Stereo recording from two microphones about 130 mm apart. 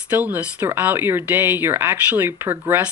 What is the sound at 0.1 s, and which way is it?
Speech, 10° right (ahead or behind).